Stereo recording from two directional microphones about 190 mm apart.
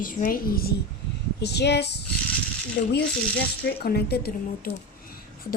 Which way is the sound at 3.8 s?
55° left (ahead or behind).